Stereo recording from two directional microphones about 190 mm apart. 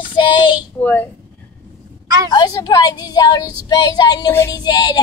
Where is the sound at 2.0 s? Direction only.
20° right (ahead or behind).